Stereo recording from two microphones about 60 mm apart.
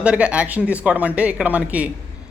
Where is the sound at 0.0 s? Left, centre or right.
Centre.